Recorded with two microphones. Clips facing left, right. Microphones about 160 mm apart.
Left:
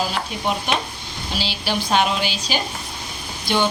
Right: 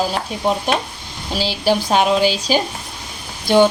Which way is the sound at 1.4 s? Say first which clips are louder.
Right 8 dB; 45° right (ahead or behind).